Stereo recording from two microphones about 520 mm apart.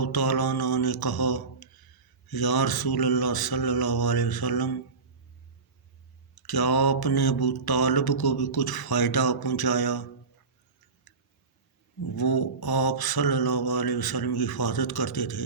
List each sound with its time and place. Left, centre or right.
0.0 s mantra: left
6.3 s mantra: left
11.1 s a sound: left
12.1 s mantra: left